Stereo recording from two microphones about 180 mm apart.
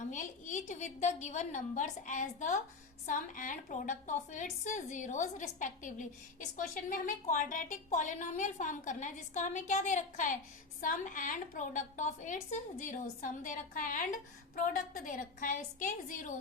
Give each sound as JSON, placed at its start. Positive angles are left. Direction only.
{"t": 0.1, "sound": "a woman's voice", "side_deg": 45}